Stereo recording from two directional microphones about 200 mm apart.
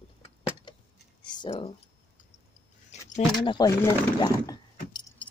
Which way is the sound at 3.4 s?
20° left (ahead or behind).